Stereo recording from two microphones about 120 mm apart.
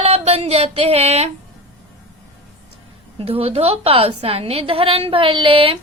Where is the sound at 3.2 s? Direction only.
55° right (ahead or behind).